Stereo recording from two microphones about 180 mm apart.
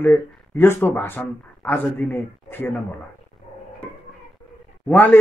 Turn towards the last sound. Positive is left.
turn(degrees=10)  # may be behind; listen again after turning